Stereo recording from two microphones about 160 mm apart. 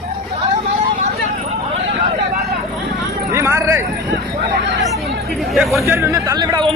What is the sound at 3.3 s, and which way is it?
Speech, 15° right (ahead or behind).